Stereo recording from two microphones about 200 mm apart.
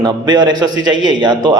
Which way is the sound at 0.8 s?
70° right (ahead or behind).